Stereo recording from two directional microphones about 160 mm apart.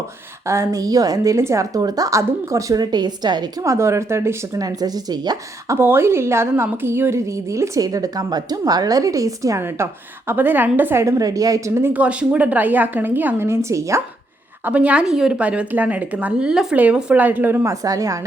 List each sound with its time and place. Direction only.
0.4 s a woman's voice: 15° right (ahead or behind)